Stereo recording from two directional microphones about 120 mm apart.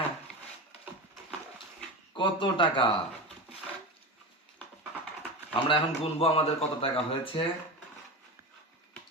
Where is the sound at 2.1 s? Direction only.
40° left (ahead or behind).